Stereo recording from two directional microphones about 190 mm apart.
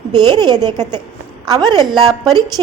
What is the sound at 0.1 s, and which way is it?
A woman's voice, 20° right (ahead or behind).